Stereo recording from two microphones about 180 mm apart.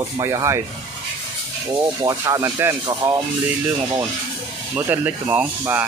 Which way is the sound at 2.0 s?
20° right (ahead or behind).